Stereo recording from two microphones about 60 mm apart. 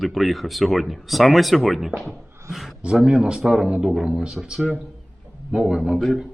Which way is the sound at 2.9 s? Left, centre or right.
Centre.